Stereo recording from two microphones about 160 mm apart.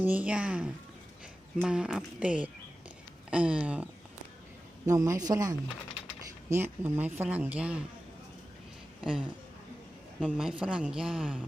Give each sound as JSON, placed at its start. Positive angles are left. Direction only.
{"t": 0.0, "sound": "speech", "side_deg": -10}
{"t": 4.9, "sound": "a man's voice", "side_deg": -20}
{"t": 9.0, "sound": "speech", "side_deg": -5}
{"t": 10.2, "sound": "a woman's voice", "side_deg": -5}